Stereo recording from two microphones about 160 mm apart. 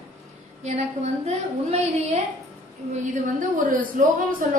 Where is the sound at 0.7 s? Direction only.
40° right (ahead or behind).